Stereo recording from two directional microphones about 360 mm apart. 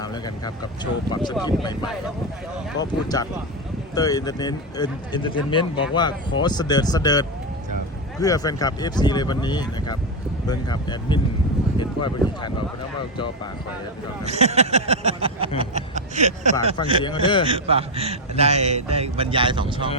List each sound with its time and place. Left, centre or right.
0.0 s speech: centre
2.8 s speech: left
3.9 s speech: centre
11.8 s a sound: centre
13.1 s speech: centre
14.3 s a sound: centre
17.0 s speech: centre
17.5 s a man's voice: centre